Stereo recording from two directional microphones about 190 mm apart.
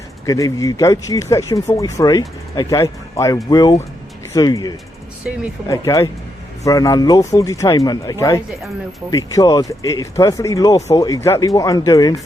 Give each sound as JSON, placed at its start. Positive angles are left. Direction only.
{"t": 0.3, "sound": "speech", "side_deg": 20}
{"t": 5.2, "sound": "speech", "side_deg": -5}
{"t": 5.6, "sound": "speech", "side_deg": 15}